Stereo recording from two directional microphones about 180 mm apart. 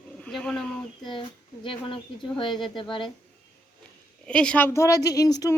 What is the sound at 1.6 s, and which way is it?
A woman's voice, 25° left (ahead or behind).